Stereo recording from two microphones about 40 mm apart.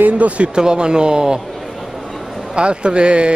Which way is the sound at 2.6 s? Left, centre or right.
Right.